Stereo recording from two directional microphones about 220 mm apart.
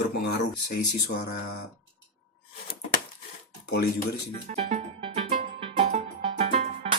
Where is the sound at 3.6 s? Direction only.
50° left (ahead or behind).